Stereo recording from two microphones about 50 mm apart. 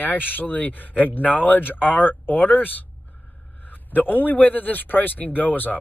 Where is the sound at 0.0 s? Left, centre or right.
Left.